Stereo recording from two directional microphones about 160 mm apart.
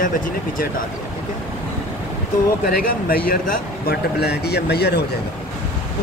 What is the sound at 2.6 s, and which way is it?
Speech, 65° left (ahead or behind).